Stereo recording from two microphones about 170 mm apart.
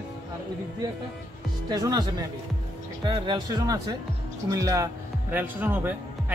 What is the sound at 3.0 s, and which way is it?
Speech, 25° right (ahead or behind).